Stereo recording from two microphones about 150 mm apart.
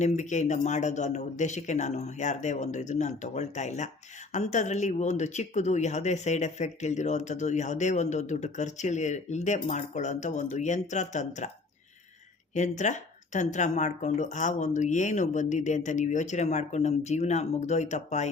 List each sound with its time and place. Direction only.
0.0 s speech: 55° left (ahead or behind)
12.5 s speech: 55° left (ahead or behind)